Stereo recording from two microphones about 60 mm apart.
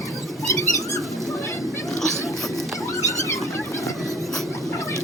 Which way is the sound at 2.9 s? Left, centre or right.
Left.